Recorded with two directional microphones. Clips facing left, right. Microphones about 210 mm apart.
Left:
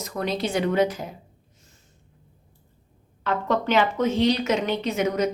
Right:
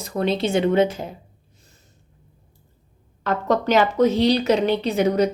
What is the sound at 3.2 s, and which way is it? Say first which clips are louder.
Speech: right 3 dB; 40° right (ahead or behind).